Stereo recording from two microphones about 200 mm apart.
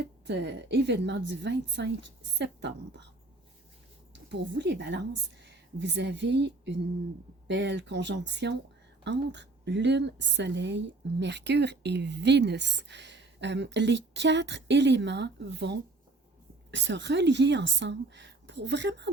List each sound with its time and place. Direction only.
0.3 s a woman's voice: 60° right (ahead or behind)
4.1 s a woman's voice: 60° right (ahead or behind)